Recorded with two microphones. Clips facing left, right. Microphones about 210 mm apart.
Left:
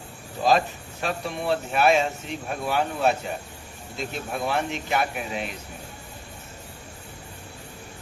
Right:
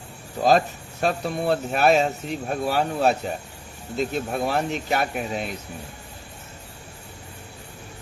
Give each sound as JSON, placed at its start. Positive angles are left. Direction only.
{"t": 1.0, "sound": "speech", "side_deg": -40}